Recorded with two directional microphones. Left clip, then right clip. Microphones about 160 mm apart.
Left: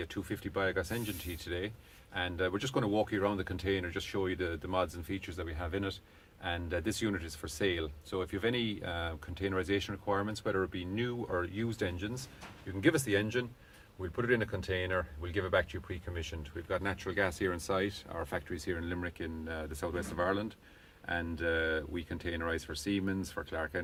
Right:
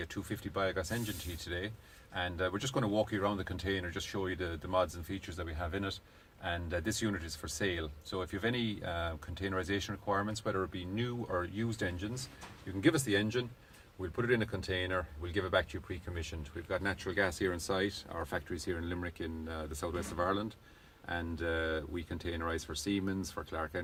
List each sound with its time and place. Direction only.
0.0 s speech: 10° left (ahead or behind)